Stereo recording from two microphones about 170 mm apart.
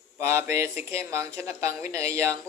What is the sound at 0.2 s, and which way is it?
Speech, 15° right (ahead or behind).